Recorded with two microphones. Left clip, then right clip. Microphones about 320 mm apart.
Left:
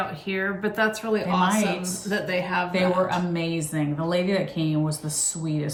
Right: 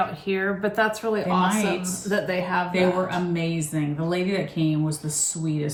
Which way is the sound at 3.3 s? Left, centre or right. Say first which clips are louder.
Even; centre.